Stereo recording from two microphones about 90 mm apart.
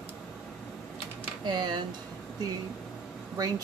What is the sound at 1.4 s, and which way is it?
Speech, 55° right (ahead or behind).